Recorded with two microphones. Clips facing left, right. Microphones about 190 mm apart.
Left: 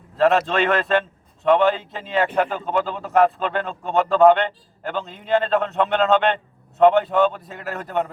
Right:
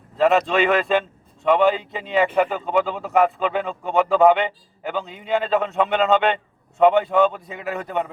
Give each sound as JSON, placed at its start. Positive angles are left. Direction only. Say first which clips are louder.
{"t": 0.2, "sound": "a man's voice", "louder": "even", "side_deg": 0}